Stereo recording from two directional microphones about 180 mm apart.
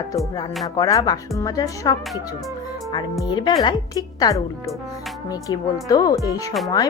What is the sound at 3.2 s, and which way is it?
Speech, 25° left (ahead or behind).